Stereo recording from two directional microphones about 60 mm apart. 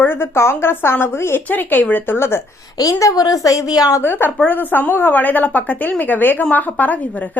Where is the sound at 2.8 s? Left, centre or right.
Left.